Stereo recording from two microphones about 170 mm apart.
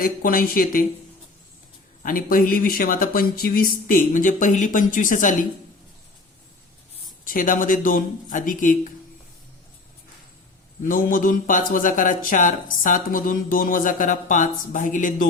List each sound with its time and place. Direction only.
0.0 s speech: 55° left (ahead or behind)
2.0 s a man's voice: 55° left (ahead or behind)
7.3 s a man's voice: 50° left (ahead or behind)
10.8 s a man's voice: 50° left (ahead or behind)